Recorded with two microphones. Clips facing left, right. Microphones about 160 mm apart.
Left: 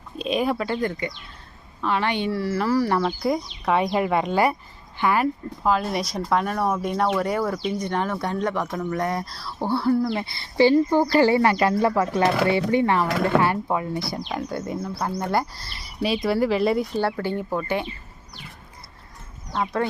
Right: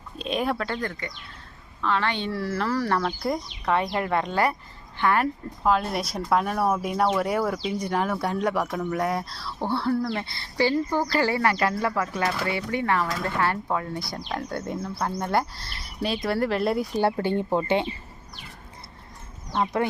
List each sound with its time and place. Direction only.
0.2 s speech: centre (ahead or behind)
2.3 s a woman's voice: centre (ahead or behind); by 13.1 s 25° left (ahead or behind)
13.1 s speech: 75° left (ahead or behind)
13.4 s speech: 15° left (ahead or behind)
16.8 s speech: 15° right (ahead or behind)